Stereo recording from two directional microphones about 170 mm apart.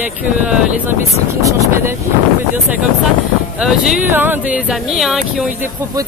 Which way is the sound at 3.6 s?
5° right (ahead or behind).